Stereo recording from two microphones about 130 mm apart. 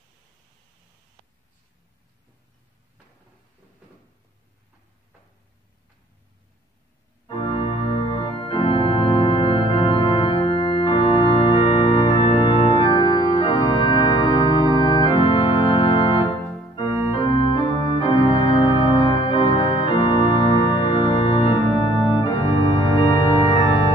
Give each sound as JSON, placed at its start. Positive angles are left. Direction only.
{"t": 7.3, "sound": "organ", "side_deg": 40}
{"t": 12.8, "sound": "music", "side_deg": 40}
{"t": 14.8, "sound": "organ", "side_deg": 35}
{"t": 20.6, "sound": "music", "side_deg": 40}